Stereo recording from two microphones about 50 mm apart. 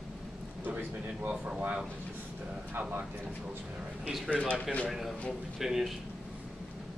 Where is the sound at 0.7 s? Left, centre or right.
Right.